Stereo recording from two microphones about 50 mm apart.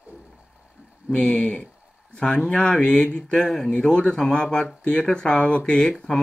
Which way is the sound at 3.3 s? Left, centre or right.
Centre.